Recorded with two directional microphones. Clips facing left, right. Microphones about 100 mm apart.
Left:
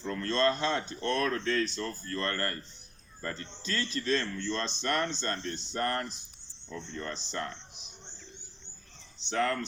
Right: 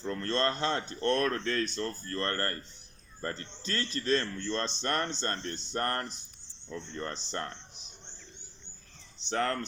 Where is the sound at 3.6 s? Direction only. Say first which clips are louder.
Even; 45° right (ahead or behind).